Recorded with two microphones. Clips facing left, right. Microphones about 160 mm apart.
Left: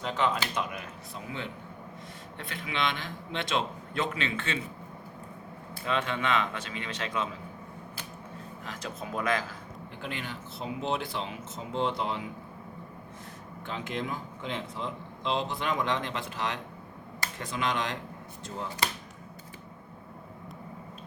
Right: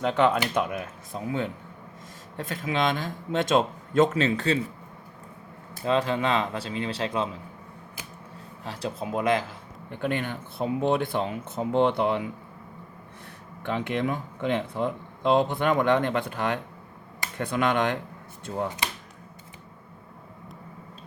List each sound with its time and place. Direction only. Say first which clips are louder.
0.0 s a man's voice: right 7 dB; 55° right (ahead or behind); by 4.6 s 40° right (ahead or behind)
5.7 s speech: right 6 dB; 35° right (ahead or behind)
8.6 s speech: right 7 dB; 30° right (ahead or behind)
10.0 s speech: right 10 dB; 55° right (ahead or behind)
13.6 s speech: right 7 dB; 65° right (ahead or behind)